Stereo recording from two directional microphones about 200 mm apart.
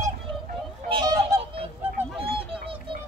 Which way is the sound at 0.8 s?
25° right (ahead or behind).